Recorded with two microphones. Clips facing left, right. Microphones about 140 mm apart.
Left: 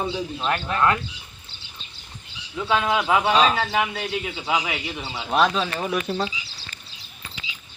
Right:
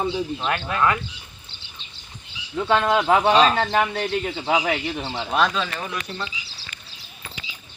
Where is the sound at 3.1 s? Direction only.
40° right (ahead or behind).